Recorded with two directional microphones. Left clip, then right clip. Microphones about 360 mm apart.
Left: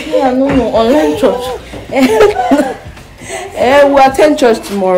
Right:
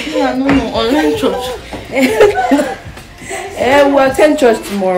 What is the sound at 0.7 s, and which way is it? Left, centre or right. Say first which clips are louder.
Speech: left 3 dB; left.